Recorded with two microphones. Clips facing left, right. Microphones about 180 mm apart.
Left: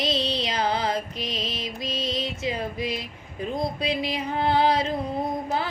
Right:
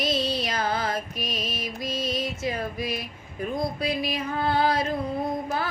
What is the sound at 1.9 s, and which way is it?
Music, 50° right (ahead or behind).